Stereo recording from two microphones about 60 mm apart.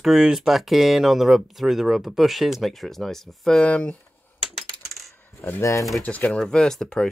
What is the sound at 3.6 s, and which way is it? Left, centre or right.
Speech, centre.